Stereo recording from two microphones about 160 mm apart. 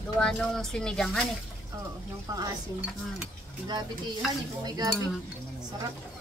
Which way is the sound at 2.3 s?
25° right (ahead or behind).